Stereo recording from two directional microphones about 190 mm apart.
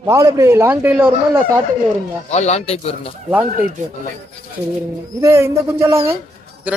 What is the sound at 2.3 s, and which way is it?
Speech, 35° left (ahead or behind).